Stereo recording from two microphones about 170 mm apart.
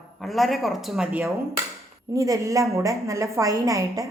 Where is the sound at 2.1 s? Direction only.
20° right (ahead or behind).